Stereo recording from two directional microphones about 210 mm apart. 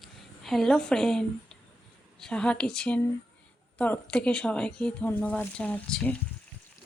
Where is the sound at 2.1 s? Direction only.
5° left (ahead or behind).